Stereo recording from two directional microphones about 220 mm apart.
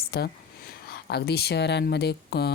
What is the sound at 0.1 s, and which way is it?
Speech, 45° left (ahead or behind).